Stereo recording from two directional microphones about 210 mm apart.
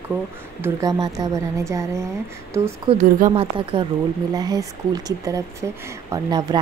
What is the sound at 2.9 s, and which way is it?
Speech, 30° right (ahead or behind).